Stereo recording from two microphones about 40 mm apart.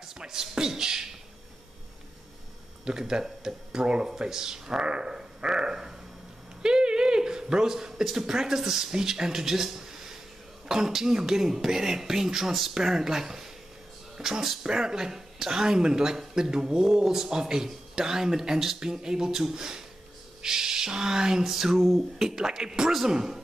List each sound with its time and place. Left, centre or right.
0.2 s speech: centre
2.8 s speech: centre
22.3 s speech: centre